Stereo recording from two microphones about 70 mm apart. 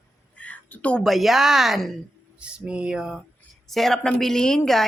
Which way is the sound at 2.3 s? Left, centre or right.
Centre.